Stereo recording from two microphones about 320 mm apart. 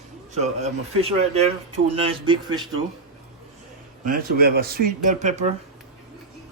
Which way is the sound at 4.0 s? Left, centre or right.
Right.